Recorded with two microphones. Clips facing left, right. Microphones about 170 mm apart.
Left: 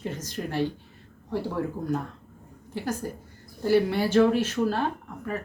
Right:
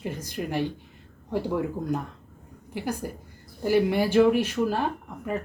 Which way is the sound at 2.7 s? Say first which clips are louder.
Even; 15° right (ahead or behind).